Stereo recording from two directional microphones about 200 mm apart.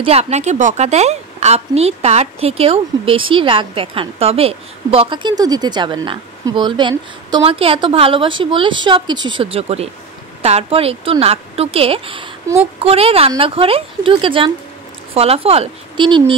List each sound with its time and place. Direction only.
0.0 s a woman's voice: 30° right (ahead or behind)